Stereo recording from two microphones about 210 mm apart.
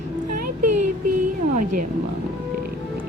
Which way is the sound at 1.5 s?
40° right (ahead or behind).